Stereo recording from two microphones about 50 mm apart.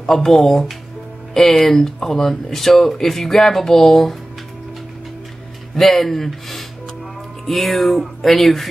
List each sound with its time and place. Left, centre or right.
0.0 s speech: centre
5.8 s speech: centre